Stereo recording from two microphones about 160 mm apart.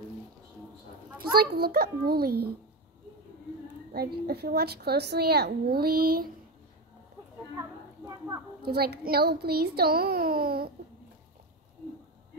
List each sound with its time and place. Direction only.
1.3 s a child's voice: 75° right (ahead or behind)
3.9 s a woman's voice: 75° right (ahead or behind)
7.5 s speech: 20° right (ahead or behind)
8.6 s a child's voice: 75° right (ahead or behind)